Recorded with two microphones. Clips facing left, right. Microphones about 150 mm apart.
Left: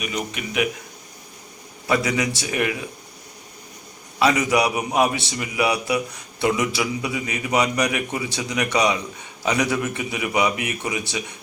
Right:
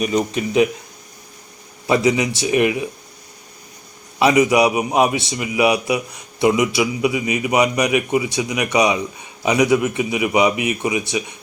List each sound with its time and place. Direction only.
0.0 s speech: 35° right (ahead or behind)
1.9 s a man's voice: 20° right (ahead or behind)
4.2 s a man's voice: 20° right (ahead or behind)